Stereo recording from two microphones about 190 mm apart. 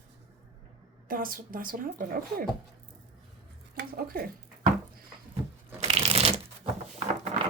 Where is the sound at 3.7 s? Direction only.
55° right (ahead or behind).